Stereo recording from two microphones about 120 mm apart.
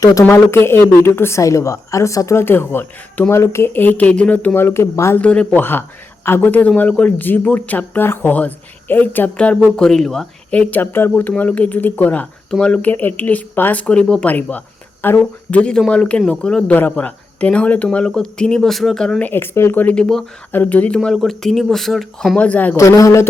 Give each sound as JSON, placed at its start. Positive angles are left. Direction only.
{"t": 0.0, "sound": "speech", "side_deg": 30}
{"t": 5.2, "sound": "speech", "side_deg": 10}
{"t": 22.8, "sound": "speech", "side_deg": 25}